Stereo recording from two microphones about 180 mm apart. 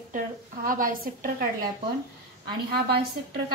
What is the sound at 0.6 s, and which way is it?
Speech, 50° right (ahead or behind).